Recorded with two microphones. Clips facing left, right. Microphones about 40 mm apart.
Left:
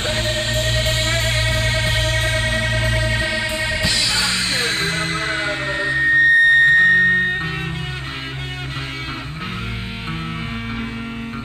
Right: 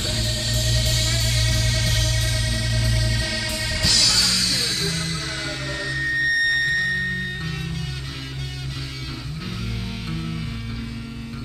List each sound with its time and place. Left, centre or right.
0.0 s music: left